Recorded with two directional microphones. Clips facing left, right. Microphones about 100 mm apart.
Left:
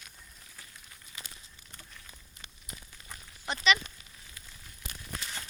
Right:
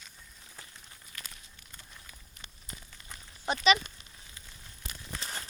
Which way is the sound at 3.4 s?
20° right (ahead or behind).